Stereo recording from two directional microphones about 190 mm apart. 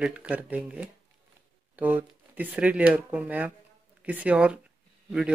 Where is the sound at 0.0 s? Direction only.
5° right (ahead or behind).